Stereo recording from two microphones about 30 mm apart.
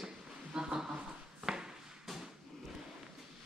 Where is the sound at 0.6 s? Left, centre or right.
Centre.